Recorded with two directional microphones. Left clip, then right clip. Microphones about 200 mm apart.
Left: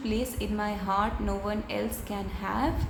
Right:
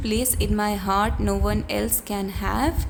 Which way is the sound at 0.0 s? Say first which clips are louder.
Right 6 dB; 50° right (ahead or behind).